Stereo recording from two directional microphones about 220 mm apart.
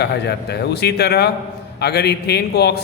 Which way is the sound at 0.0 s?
50° left (ahead or behind).